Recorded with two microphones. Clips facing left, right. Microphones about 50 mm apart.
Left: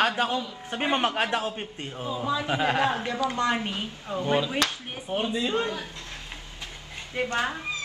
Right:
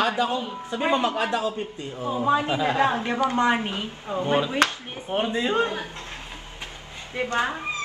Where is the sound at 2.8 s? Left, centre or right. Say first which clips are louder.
Right 3 dB; right.